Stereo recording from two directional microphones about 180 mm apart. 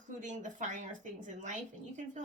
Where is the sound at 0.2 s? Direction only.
45° right (ahead or behind).